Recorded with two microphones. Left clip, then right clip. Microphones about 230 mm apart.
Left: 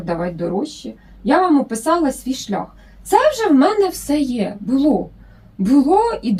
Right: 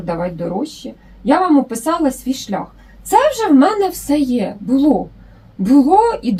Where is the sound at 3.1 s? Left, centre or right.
Centre.